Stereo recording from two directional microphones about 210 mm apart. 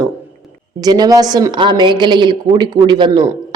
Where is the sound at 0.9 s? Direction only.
20° right (ahead or behind).